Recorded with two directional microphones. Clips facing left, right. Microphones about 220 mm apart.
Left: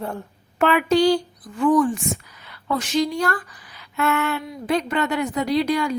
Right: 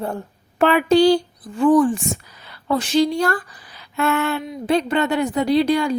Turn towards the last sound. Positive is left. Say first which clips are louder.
# right 4 dB
turn(degrees=-30)  # may be behind; listen again after turning